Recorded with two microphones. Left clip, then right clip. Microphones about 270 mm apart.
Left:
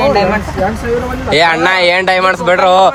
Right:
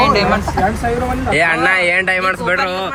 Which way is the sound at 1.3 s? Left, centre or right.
Centre.